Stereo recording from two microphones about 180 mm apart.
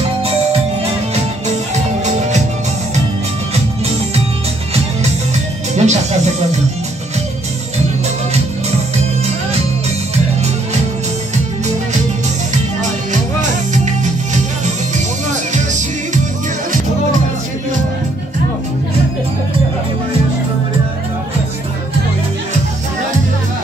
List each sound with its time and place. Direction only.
2.0 s music: 40° right (ahead or behind)
5.8 s music: 40° right (ahead or behind)
15.5 s music: 45° right (ahead or behind)